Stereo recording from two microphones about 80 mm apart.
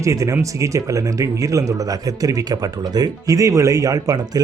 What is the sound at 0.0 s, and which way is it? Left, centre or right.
Speech, right.